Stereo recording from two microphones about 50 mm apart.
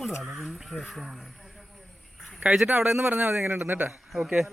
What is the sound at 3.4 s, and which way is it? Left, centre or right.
Speech, right.